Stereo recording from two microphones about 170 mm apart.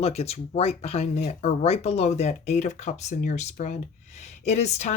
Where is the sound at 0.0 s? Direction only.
35° left (ahead or behind).